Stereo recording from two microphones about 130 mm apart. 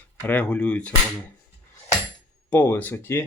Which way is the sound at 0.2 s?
10° left (ahead or behind).